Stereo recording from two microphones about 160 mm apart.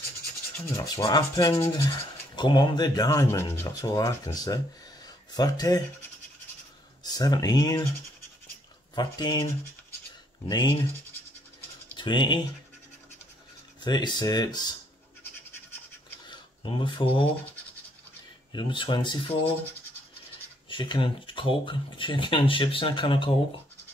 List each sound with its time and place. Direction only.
0.7 s rub: 25° left (ahead or behind)
5.0 s a sound: 25° left (ahead or behind)
7.0 s speech: 25° left (ahead or behind)
8.9 s rub: 25° left (ahead or behind)
12.0 s speech: 30° left (ahead or behind)
13.7 s rub: 25° left (ahead or behind)
16.3 s a sound: 30° left (ahead or behind)
18.5 s rub: 30° left (ahead or behind)
20.7 s speech: 30° left (ahead or behind)